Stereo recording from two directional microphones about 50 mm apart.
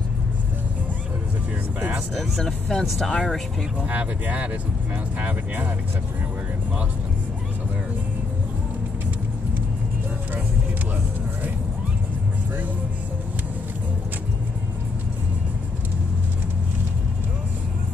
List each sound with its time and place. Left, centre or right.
2.1 s speech: centre
3.8 s speech: right